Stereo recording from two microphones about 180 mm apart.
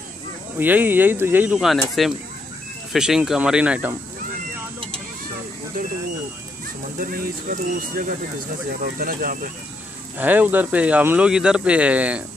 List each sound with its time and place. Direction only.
0.6 s speech: 10° right (ahead or behind)
7.0 s speech: 55° right (ahead or behind)
10.1 s speech: 10° right (ahead or behind)